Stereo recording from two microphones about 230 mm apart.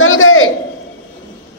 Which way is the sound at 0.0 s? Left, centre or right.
Left.